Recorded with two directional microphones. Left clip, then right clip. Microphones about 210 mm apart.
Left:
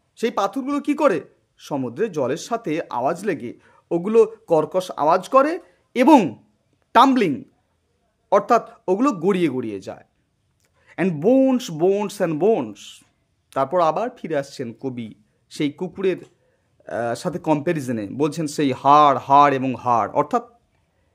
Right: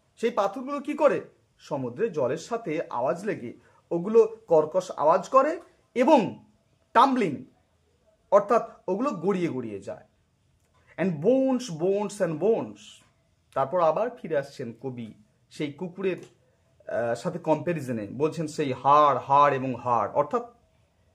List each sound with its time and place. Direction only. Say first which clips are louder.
0.1 s speech: left 4 dB; 45° left (ahead or behind)